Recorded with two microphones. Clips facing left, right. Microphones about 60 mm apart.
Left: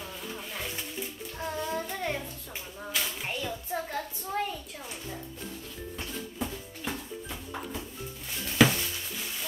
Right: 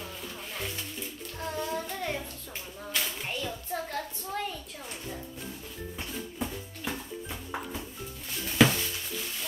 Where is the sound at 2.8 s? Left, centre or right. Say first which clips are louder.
Even; centre.